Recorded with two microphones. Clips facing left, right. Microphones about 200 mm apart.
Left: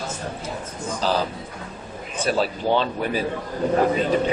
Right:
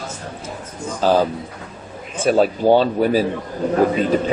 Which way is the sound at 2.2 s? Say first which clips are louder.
Right 7 dB; 45° right (ahead or behind).